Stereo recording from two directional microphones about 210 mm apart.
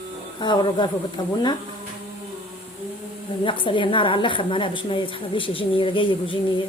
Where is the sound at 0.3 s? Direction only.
20° left (ahead or behind).